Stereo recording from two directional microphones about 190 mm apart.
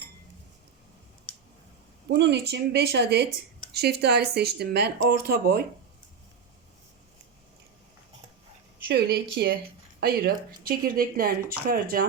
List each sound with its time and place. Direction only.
2.0 s speech: 65° right (ahead or behind)
8.9 s speech: 55° right (ahead or behind)